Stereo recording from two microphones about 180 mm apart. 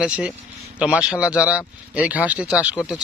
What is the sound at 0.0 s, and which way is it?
Speech, 5° right (ahead or behind).